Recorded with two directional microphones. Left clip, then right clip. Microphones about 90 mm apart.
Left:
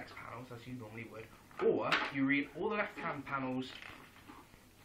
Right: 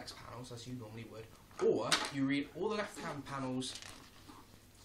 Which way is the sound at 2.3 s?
35° right (ahead or behind).